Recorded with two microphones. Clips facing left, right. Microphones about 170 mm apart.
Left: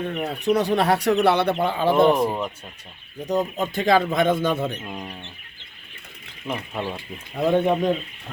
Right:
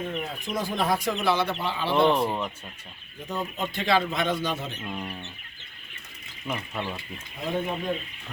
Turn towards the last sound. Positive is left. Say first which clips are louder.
# left 10 dB
turn(degrees=70)  # may be behind; listen again after turning